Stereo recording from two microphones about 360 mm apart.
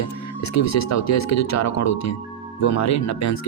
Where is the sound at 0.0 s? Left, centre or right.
Left.